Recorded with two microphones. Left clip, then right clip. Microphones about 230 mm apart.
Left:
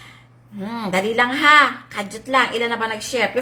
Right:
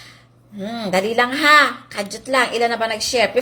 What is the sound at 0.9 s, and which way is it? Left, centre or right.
A woman's voice, centre.